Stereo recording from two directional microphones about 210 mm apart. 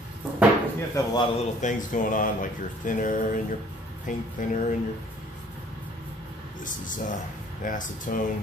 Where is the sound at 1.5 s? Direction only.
40° left (ahead or behind).